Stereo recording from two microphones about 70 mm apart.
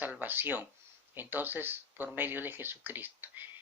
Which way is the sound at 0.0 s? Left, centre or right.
Right.